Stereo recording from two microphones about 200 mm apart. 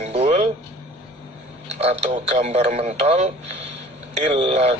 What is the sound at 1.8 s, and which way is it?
Speech, 30° right (ahead or behind).